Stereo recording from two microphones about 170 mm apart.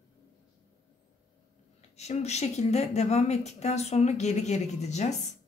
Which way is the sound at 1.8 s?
40° left (ahead or behind).